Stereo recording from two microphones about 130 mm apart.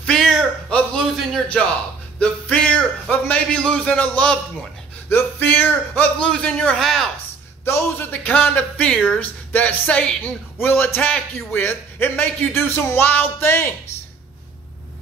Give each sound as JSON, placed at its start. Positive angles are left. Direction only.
{"t": 0.0, "sound": "a sound", "side_deg": 5}
{"t": 2.1, "sound": "a man's voice", "side_deg": 10}
{"t": 7.6, "sound": "a man's voice", "side_deg": 20}